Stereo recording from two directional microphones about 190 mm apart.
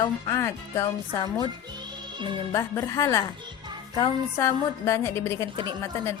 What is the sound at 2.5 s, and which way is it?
Speech, 15° left (ahead or behind).